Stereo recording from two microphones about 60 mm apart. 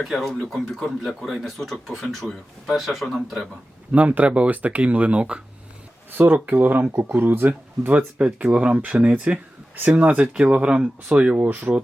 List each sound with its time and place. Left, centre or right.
0.0 s speech: centre
3.9 s speech: right
6.1 s speech: right
11.4 s speech: right